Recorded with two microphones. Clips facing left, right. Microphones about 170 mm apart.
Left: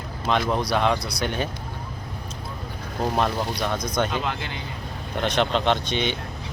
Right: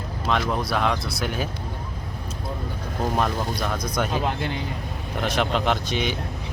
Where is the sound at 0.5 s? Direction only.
Centre (ahead or behind).